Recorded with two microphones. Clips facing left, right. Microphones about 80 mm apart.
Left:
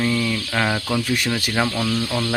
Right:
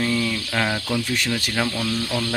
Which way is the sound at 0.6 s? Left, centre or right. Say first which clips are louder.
Left 2 dB; centre.